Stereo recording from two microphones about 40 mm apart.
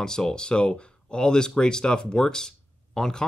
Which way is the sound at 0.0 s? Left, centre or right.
Centre.